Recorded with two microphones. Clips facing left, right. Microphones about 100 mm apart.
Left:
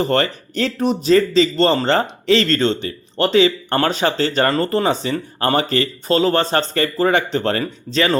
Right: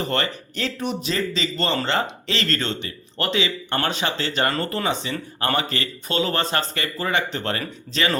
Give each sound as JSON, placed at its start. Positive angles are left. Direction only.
{"t": 0.0, "sound": "speech", "side_deg": 35}